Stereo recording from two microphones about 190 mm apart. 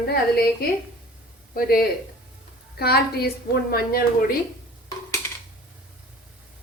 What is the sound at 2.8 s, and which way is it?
A woman's voice, 55° left (ahead or behind).